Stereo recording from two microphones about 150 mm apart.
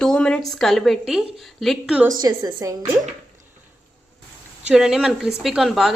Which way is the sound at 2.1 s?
25° right (ahead or behind).